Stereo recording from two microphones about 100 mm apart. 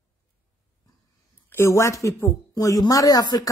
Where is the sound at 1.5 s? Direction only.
25° left (ahead or behind).